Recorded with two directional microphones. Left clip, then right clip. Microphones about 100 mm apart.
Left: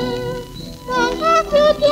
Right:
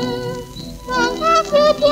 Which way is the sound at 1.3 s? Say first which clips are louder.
Even; 15° left (ahead or behind).